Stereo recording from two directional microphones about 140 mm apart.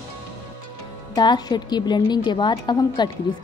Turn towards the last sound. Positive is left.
turn(degrees=30)  # may be behind; listen again after turning